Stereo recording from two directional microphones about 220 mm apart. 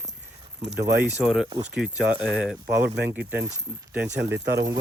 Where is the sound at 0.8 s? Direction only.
50° right (ahead or behind).